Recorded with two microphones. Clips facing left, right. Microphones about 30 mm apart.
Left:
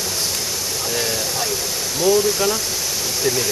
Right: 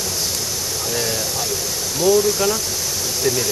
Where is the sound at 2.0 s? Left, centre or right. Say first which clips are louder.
Right 1 dB; centre.